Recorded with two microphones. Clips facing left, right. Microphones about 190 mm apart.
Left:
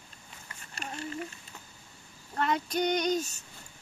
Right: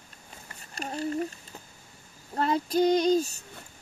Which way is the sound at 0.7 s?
35° right (ahead or behind).